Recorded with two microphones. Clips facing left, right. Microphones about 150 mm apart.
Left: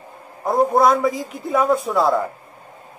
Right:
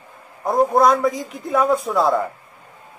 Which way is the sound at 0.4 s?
Centre (ahead or behind).